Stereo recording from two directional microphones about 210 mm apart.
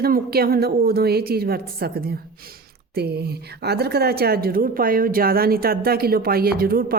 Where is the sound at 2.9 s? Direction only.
50° right (ahead or behind).